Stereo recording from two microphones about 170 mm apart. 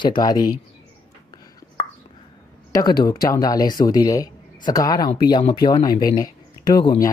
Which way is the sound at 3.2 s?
20° left (ahead or behind).